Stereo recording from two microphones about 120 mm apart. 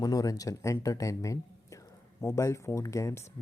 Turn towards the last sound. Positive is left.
turn(degrees=25)  # may be behind; listen again after turning